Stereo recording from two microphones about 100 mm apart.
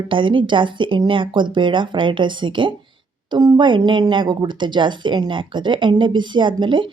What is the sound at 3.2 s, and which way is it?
Speech, 45° right (ahead or behind).